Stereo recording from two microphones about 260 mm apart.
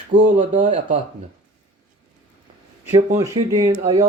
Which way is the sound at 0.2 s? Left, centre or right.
Right.